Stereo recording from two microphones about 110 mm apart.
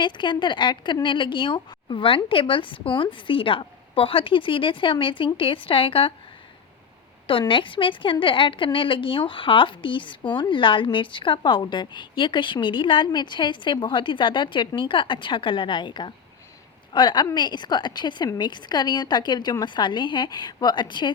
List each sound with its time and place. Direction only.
0.0 s a woman's voice: 45° left (ahead or behind)
7.3 s a woman's voice: 50° left (ahead or behind)